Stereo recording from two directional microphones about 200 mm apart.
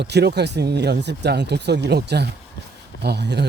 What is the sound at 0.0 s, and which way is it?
Speech, 55° right (ahead or behind).